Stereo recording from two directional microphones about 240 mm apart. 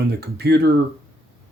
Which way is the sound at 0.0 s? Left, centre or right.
Right.